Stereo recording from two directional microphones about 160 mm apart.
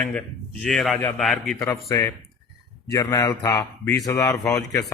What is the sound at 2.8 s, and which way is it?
A man's voice, 20° left (ahead or behind).